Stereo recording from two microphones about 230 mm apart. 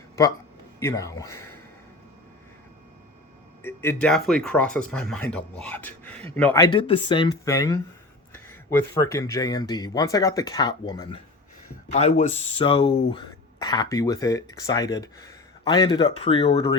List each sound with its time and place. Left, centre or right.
0.2 s speech: centre
3.6 s speech: centre
9.0 s speech: centre